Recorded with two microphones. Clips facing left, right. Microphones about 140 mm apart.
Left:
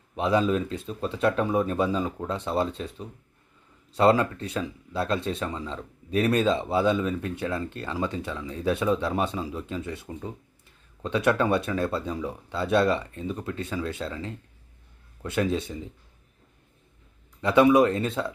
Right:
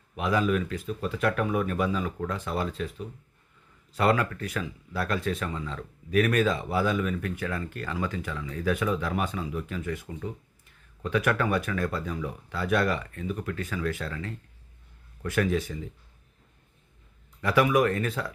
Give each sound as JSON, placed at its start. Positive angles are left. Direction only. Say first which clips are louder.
{"t": 0.2, "sound": "speech", "louder": "left 2 dB", "side_deg": 25}
{"t": 17.4, "sound": "speech", "louder": "left 4 dB", "side_deg": 25}